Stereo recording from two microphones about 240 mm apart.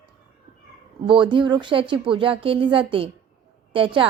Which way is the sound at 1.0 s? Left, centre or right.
Centre.